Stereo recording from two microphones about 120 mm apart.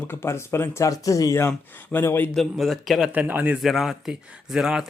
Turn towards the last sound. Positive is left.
turn(degrees=-5)  # may be behind; listen again after turning